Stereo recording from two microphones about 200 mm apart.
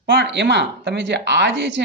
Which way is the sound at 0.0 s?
55° right (ahead or behind).